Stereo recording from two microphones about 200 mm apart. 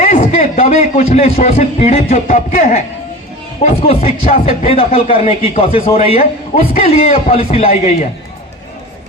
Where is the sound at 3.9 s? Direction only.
30° left (ahead or behind).